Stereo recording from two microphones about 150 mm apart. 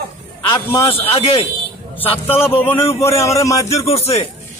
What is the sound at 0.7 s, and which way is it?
Speech, 15° left (ahead or behind).